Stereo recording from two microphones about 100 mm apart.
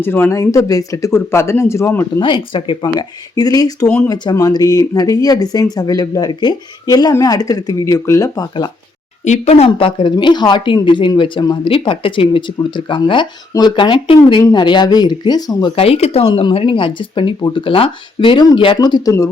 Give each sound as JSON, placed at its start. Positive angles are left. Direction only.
{"t": 0.0, "sound": "speech", "side_deg": 20}
{"t": 0.3, "sound": "speech", "side_deg": 35}
{"t": 2.2, "sound": "speech", "side_deg": 55}
{"t": 2.8, "sound": "speech", "side_deg": 40}
{"t": 9.4, "sound": "speech", "side_deg": 90}
{"t": 9.6, "sound": "speech", "side_deg": 60}
{"t": 15.7, "sound": "speech", "side_deg": 80}
{"t": 16.3, "sound": "speech", "side_deg": 55}